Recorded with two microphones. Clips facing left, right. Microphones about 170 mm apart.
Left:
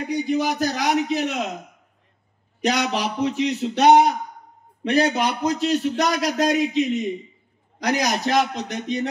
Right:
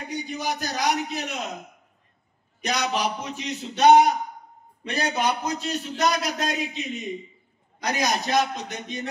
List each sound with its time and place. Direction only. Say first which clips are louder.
0.3 s a man's voice: left 8 dB; 85° left
2.6 s a sound: left 3 dB; 75° left (ahead or behind)
4.8 s a man's voice: left 5 dB; 85° left